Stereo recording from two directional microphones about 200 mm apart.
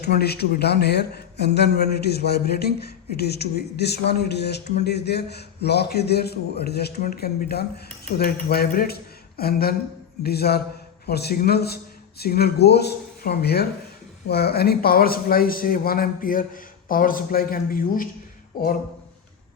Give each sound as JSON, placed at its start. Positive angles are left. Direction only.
{"t": 0.0, "sound": "a man's voice", "side_deg": 55}